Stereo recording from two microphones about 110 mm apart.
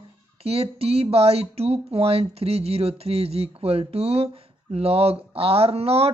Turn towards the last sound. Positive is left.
turn(degrees=-65)  # may be behind; listen again after turning